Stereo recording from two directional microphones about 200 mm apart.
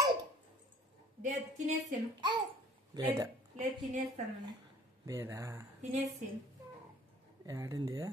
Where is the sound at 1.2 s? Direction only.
35° right (ahead or behind).